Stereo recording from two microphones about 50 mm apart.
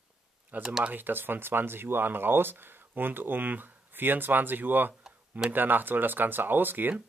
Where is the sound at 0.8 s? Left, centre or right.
Right.